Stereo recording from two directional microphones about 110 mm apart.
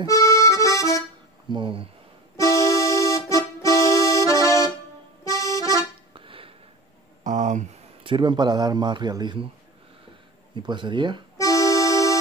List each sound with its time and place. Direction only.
0.0 s accordion: 30° left (ahead or behind)
1.5 s speech: 50° right (ahead or behind)
2.3 s music: 30° left (ahead or behind)
5.4 s accordion: 30° left (ahead or behind)
6.1 s a sound: 55° right (ahead or behind)
7.2 s a sound: 90° right
8.0 s speech: 50° right (ahead or behind)
10.5 s speech: 45° right (ahead or behind)
11.3 s accordion: 30° left (ahead or behind)